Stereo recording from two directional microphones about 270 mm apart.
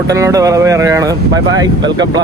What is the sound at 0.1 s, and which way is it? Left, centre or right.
Speech, centre.